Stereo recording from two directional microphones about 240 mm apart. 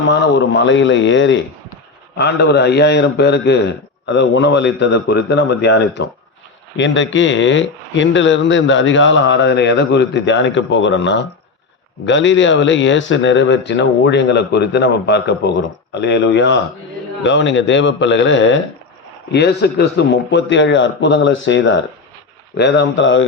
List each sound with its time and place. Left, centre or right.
0.1 s a man's voice: left